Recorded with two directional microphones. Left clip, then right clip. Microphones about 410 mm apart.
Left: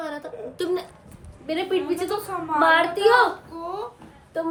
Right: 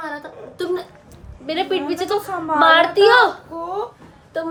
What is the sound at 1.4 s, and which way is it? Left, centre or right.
A woman's voice, right.